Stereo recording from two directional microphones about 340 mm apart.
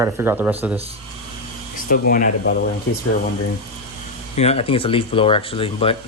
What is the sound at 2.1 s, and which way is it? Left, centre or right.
Speech, left.